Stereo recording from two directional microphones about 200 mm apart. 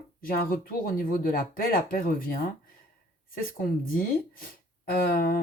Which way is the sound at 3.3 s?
45° left (ahead or behind).